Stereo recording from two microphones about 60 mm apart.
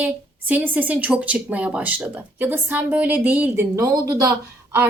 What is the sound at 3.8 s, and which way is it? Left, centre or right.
Speech, right.